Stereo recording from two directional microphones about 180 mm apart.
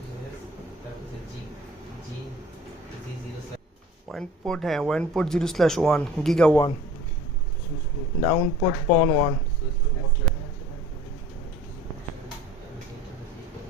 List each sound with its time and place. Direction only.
4.1 s speech: 5° left (ahead or behind)
8.2 s speech: 25° left (ahead or behind)